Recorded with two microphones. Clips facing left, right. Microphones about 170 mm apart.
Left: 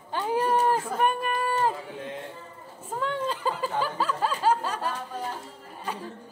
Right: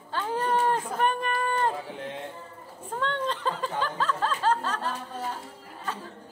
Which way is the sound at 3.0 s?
5° left (ahead or behind).